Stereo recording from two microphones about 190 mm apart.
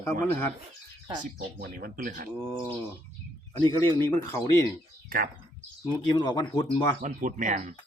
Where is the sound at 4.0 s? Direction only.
15° left (ahead or behind).